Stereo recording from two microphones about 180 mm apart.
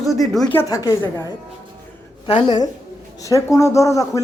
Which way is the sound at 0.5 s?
20° left (ahead or behind).